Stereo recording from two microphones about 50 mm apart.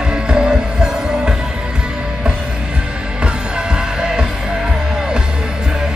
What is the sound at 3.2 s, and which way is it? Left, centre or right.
Music, centre.